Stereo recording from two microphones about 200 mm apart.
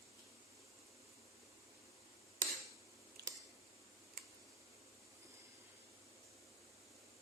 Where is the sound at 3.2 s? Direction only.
50° right (ahead or behind).